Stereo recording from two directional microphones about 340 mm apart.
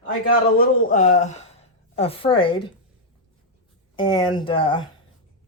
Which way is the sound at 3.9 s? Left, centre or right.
Centre.